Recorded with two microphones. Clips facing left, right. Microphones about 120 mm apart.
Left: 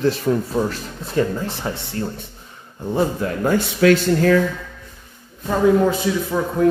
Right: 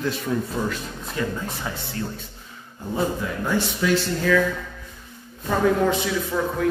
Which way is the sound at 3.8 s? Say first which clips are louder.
Left 9 dB; 90° left.